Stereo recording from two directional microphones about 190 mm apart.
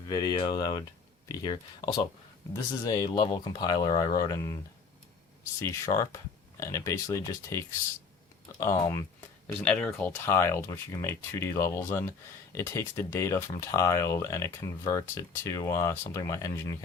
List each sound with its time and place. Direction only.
0.1 s speech: 20° left (ahead or behind)
5.5 s speech: 15° left (ahead or behind)